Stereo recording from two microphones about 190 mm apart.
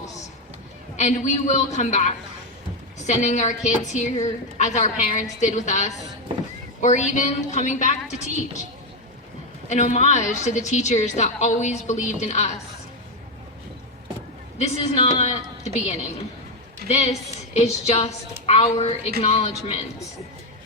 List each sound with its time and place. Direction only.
0.9 s a woman's voice: 40° left (ahead or behind)
9.6 s a woman's voice: 40° left (ahead or behind)
14.6 s a woman's voice: 30° left (ahead or behind)